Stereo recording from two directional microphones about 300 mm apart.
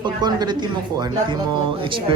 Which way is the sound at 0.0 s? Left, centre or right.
Centre.